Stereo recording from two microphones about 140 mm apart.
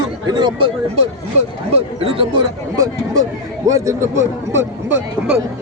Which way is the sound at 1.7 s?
45° right (ahead or behind).